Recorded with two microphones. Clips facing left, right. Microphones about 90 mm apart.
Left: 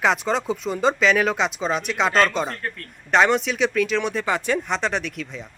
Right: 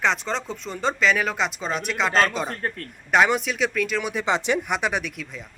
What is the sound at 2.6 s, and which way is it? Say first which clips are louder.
Speech: right 2 dB; 30° right (ahead or behind).